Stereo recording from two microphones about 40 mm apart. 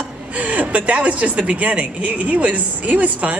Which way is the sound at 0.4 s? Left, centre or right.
Right.